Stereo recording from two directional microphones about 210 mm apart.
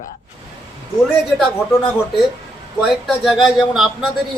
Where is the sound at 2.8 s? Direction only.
Centre (ahead or behind).